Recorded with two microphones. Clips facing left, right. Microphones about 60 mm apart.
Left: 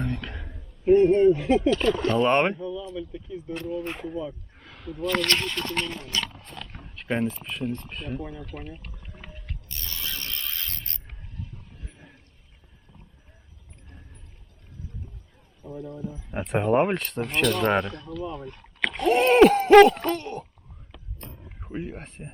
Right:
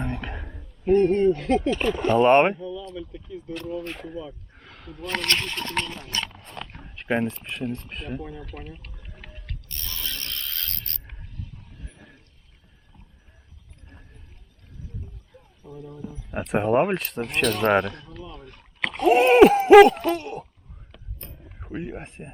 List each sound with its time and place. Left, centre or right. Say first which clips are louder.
0.0 s a sound: even; centre
0.9 s speech: left 2 dB; centre
1.7 s speech: right 1 dB; centre
2.6 s speech: left 1 dB; centre
5.0 s speech: left 2 dB; right
6.3 s a sound: even; centre
6.8 s speech: right 2 dB; centre
9.6 s mechanisms: even; centre
15.6 s speech: left 3 dB; centre
16.5 s a sound: right 1 dB; centre
17.6 s speech: right 3 dB; centre
18.8 s a sound: right 3 dB; centre
21.6 s speech: right 1 dB; centre